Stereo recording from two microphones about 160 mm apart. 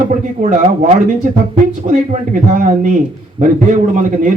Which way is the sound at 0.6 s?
45° right (ahead or behind).